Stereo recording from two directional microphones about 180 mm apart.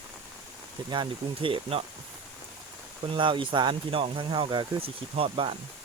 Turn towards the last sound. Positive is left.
turn(degrees=-30)  # may be behind; listen again after turning